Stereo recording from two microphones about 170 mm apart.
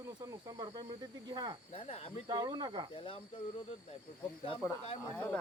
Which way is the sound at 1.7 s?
35° left (ahead or behind).